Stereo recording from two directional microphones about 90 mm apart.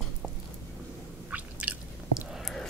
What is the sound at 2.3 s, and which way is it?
Whispering, 5° left (ahead or behind).